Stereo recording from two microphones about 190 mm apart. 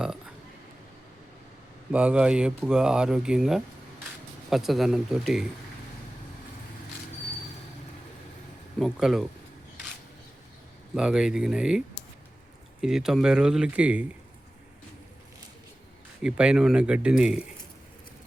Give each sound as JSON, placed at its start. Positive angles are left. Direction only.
{"t": 0.0, "sound": "a sound", "side_deg": -5}
{"t": 1.9, "sound": "speech", "side_deg": -5}
{"t": 8.8, "sound": "speech", "side_deg": 0}
{"t": 10.9, "sound": "speech", "side_deg": -5}
{"t": 12.8, "sound": "speech", "side_deg": -5}
{"t": 16.2, "sound": "speech", "side_deg": -5}